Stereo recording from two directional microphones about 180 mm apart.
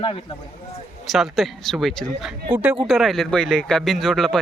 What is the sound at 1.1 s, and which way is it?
Speech, centre (ahead or behind).